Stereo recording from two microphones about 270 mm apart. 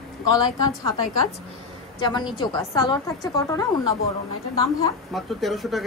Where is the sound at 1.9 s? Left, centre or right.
Centre.